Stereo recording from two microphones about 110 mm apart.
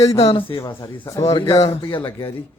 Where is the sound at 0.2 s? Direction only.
60° left (ahead or behind).